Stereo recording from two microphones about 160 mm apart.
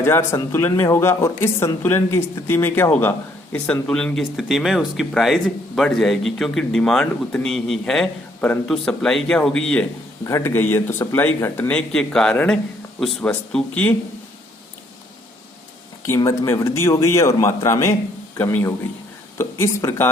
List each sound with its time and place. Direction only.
0.0 s speech: 15° left (ahead or behind)
10.2 s speech: 15° left (ahead or behind)
16.0 s speech: 20° left (ahead or behind)